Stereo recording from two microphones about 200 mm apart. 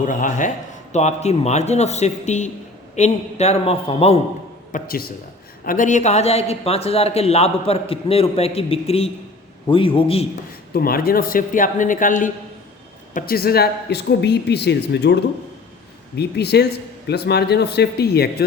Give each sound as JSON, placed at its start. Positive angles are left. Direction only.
{"t": 0.0, "sound": "a man's voice", "side_deg": 40}
{"t": 4.7, "sound": "a man's voice", "side_deg": 45}
{"t": 10.8, "sound": "speech", "side_deg": 50}